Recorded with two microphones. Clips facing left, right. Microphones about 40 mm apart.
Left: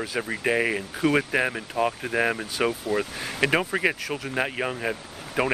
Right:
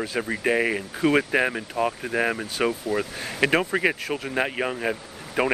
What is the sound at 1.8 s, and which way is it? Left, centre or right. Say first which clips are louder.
Speech: left 1 dB; centre.